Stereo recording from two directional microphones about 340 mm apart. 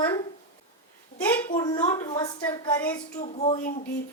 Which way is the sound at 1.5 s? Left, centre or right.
Centre.